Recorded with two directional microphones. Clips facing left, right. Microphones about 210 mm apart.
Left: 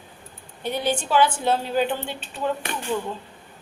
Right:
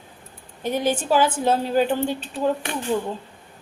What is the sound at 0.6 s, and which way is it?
A woman's voice, 40° right (ahead or behind).